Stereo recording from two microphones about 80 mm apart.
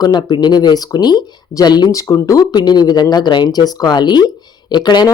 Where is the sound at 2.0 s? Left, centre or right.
Left.